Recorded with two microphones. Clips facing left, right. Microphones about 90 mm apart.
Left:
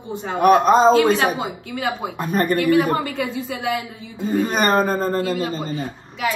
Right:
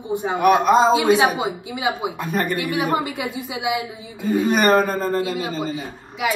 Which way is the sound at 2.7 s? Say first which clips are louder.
Left 3 dB; 15° right (ahead or behind).